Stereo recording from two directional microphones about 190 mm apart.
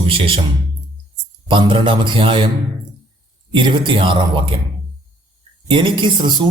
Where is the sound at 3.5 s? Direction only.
25° right (ahead or behind).